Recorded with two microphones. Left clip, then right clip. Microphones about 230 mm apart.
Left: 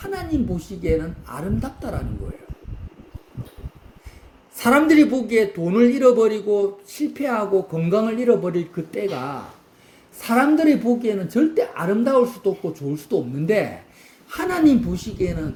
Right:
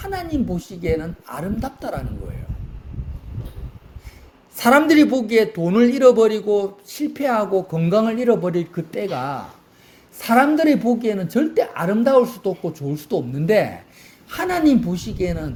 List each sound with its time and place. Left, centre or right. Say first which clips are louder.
0.0 s speech: right 1 dB; right
4.5 s speech: right 2 dB; right